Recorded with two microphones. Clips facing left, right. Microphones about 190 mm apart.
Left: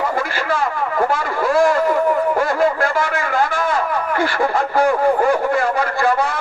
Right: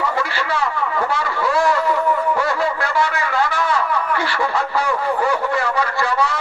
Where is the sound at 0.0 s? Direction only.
50° left (ahead or behind).